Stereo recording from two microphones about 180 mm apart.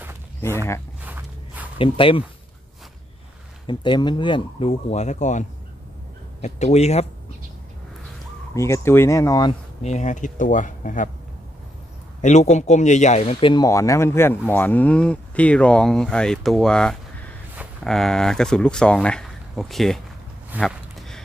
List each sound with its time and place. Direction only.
1.0 s walk: 10° right (ahead or behind)
1.8 s speech: 30° left (ahead or behind)
3.6 s speech: 25° left (ahead or behind); by 5.4 s 40° left (ahead or behind)
6.4 s speech: 40° left (ahead or behind)
8.5 s a man's voice: 15° left (ahead or behind)
9.8 s speech: 40° left (ahead or behind)
12.2 s a man's voice: 40° left (ahead or behind); by 20.0 s centre (ahead or behind)
20.6 s a sound: 5° left (ahead or behind)